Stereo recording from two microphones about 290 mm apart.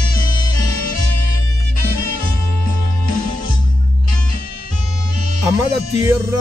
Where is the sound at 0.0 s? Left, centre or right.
Left.